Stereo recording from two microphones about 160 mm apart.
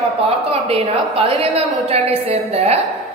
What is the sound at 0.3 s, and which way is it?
Speech, 40° right (ahead or behind).